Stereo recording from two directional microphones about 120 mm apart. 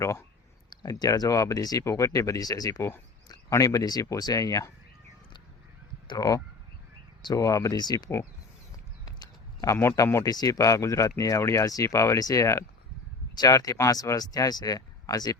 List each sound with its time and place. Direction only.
0.0 s speech: 25° left (ahead or behind)
0.7 s speech: 35° left (ahead or behind)
6.1 s speech: 30° left (ahead or behind)
8.7 s a sound: 30° left (ahead or behind)
9.7 s speech: 25° left (ahead or behind)